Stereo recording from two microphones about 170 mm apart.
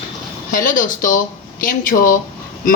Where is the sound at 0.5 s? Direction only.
50° left (ahead or behind).